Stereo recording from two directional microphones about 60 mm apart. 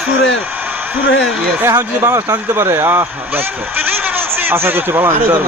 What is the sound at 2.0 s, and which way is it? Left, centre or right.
Speech, right.